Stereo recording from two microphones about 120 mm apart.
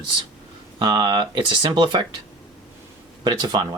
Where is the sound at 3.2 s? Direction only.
35° right (ahead or behind).